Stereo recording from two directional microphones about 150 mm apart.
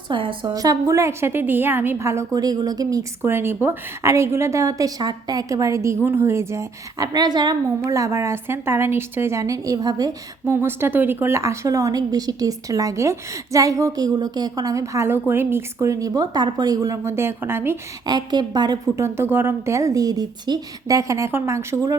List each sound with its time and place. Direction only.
0.1 s a woman's voice: 35° right (ahead or behind); by 17.7 s 15° right (ahead or behind)
18.0 s a woman's voice: 25° right (ahead or behind)